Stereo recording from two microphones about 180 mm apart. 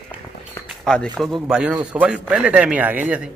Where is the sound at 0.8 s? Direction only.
5° left (ahead or behind).